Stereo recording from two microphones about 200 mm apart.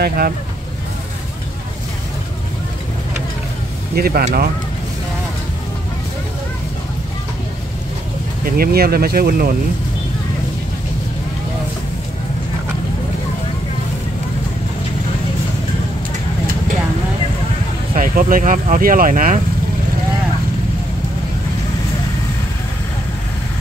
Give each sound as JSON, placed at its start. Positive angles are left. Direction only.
{"t": 0.0, "sound": "speech", "side_deg": -45}
{"t": 3.9, "sound": "speech", "side_deg": -50}
{"t": 8.5, "sound": "speech", "side_deg": -50}
{"t": 17.9, "sound": "speech", "side_deg": -40}